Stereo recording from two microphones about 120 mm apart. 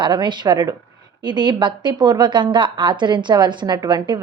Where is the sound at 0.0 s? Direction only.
40° right (ahead or behind).